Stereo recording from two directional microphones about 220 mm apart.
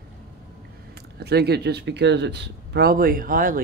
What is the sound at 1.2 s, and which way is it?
Speech, 50° right (ahead or behind).